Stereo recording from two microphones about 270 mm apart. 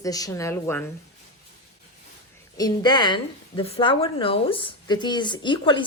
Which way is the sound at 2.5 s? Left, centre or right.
Centre.